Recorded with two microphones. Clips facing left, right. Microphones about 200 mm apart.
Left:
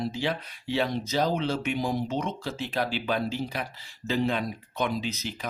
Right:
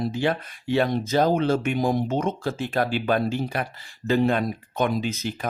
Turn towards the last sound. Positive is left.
turn(degrees=-50)  # may be behind; listen again after turning